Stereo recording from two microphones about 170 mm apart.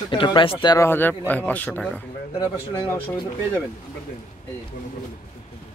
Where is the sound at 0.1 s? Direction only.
30° left (ahead or behind).